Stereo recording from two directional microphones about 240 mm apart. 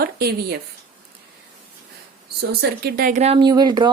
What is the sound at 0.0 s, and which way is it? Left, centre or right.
Speech, right.